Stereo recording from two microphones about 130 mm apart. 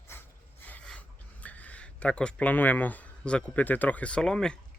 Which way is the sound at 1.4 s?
10° left (ahead or behind).